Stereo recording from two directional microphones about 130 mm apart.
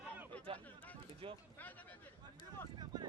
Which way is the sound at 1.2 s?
45° right (ahead or behind).